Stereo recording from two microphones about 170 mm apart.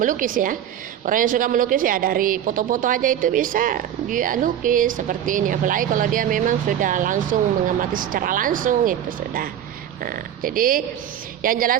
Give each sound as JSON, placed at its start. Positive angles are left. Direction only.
{"t": 0.0, "sound": "a woman's voice", "side_deg": -50}